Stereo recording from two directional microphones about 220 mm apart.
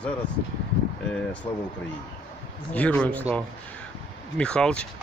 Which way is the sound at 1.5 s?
20° left (ahead or behind).